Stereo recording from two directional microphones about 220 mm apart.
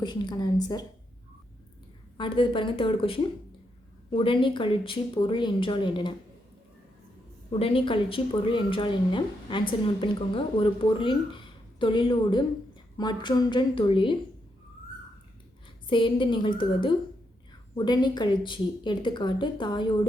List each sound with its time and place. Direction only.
0.0 s a woman's voice: 20° left (ahead or behind)
2.1 s a woman's voice: 20° left (ahead or behind)
7.5 s a woman's voice: 25° left (ahead or behind)
15.9 s a woman's voice: 20° left (ahead or behind)